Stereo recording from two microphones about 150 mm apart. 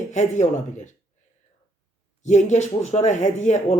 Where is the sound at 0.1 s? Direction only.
55° left (ahead or behind).